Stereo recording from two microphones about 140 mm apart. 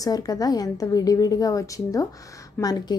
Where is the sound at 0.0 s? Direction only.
25° left (ahead or behind).